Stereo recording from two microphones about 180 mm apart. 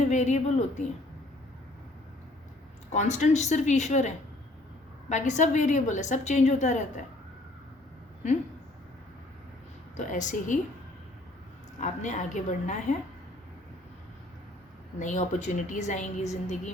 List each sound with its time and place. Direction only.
0.0 s a woman's voice: 40° left (ahead or behind)
2.9 s a woman's voice: 40° left (ahead or behind)
10.0 s a woman's voice: 45° left (ahead or behind)
11.8 s a woman's voice: 45° left (ahead or behind)
14.9 s a woman's voice: 45° left (ahead or behind)